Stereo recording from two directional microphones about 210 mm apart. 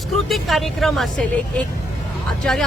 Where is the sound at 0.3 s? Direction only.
Centre (ahead or behind).